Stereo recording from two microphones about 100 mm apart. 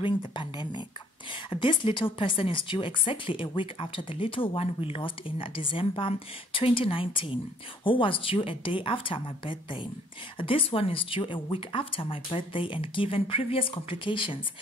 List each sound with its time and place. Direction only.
0.0 s speech: 55° left (ahead or behind)